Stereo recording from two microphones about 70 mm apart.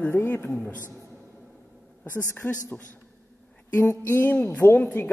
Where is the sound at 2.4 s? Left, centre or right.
Left.